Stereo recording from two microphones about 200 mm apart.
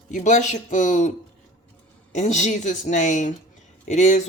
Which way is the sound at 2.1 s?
35° left (ahead or behind).